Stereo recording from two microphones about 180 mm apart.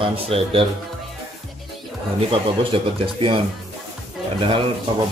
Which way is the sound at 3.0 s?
30° right (ahead or behind).